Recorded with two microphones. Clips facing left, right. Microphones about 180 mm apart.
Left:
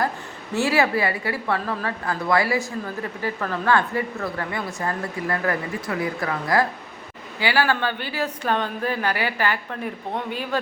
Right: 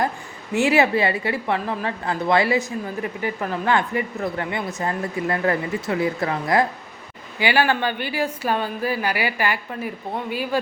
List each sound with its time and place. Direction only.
0.5 s a woman's voice: 20° right (ahead or behind)